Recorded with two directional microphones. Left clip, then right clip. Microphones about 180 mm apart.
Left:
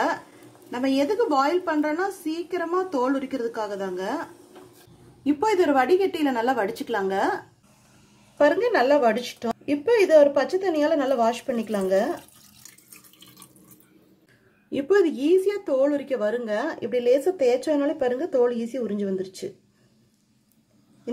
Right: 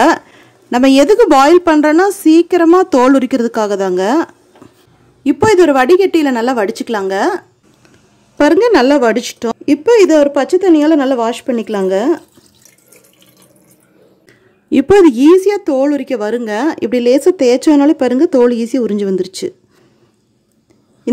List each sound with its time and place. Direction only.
0.7 s speech: 60° right (ahead or behind)
8.4 s speech: 55° right (ahead or behind)
14.7 s speech: 50° right (ahead or behind)